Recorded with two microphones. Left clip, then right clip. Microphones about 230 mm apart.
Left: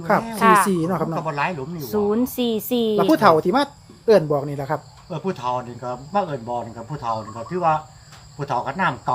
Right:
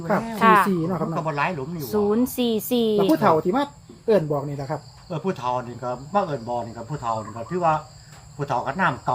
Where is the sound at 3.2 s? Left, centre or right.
Left.